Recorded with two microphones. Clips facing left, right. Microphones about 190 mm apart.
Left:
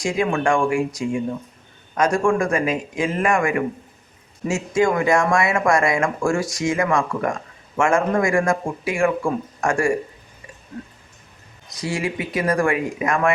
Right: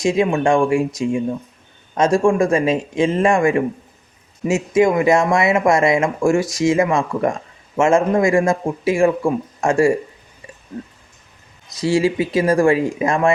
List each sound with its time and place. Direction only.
0.0 s speech: 25° right (ahead or behind)
11.8 s speech: 25° right (ahead or behind)